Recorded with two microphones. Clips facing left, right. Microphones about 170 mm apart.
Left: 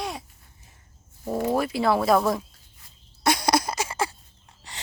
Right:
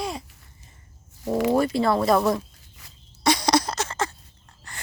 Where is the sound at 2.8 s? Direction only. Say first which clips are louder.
Right 6 dB; 90° right.